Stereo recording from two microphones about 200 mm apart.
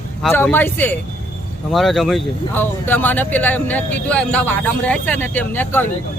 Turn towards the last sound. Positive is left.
turn(degrees=10)  # may be behind; listen again after turning